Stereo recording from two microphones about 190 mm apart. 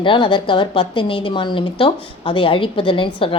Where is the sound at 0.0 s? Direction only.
25° left (ahead or behind).